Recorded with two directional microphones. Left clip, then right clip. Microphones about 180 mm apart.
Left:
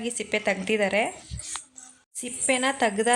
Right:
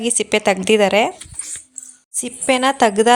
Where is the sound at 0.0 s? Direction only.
50° right (ahead or behind).